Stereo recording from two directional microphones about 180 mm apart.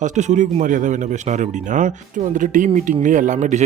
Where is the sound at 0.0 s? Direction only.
40° right (ahead or behind).